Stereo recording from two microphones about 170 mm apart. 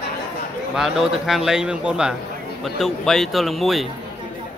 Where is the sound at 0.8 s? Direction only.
Centre (ahead or behind).